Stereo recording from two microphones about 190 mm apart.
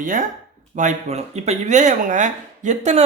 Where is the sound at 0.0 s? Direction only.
45° right (ahead or behind).